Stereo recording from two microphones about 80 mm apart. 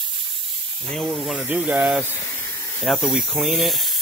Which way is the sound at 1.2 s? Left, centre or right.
Centre.